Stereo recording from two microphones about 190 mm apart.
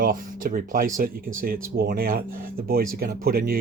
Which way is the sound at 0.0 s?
45° right (ahead or behind).